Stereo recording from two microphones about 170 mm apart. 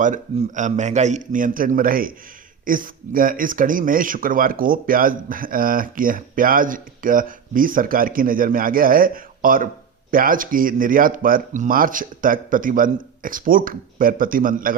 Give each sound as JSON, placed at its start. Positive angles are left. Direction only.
{"t": 0.0, "sound": "a man's voice", "side_deg": -45}